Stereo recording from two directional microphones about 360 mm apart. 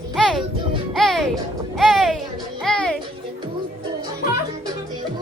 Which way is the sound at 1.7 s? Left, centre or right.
Centre.